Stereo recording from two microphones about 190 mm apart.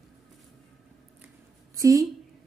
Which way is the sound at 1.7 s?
15° right (ahead or behind).